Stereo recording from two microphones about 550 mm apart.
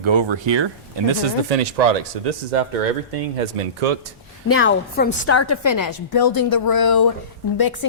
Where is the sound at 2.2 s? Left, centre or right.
Right.